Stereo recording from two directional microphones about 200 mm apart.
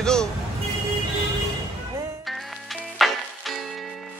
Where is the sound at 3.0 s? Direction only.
Centre (ahead or behind).